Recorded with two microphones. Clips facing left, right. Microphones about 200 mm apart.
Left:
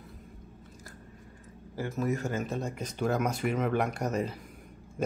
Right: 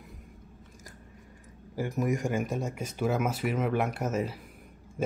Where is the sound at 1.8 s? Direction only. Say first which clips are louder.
Right 2 dB; 15° right (ahead or behind).